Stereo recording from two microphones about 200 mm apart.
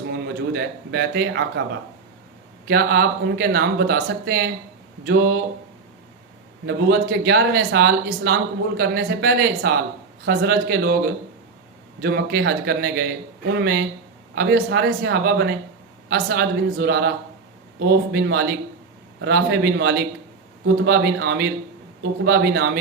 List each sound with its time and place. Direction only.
0.1 s a man's voice: 55° right (ahead or behind)
2.6 s speech: 50° right (ahead or behind)
6.7 s speech: 55° right (ahead or behind)